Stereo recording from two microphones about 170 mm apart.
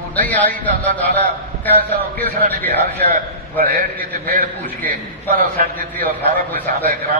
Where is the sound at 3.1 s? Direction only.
55° right (ahead or behind).